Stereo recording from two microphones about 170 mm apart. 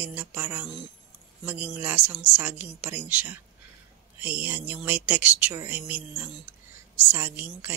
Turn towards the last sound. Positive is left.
turn(degrees=-10)  # may be behind; listen again after turning